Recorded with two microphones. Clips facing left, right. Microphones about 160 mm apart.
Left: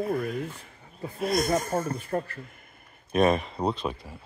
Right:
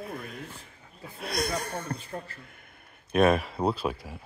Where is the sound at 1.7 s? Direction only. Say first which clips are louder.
Left 7 dB; 50° left (ahead or behind).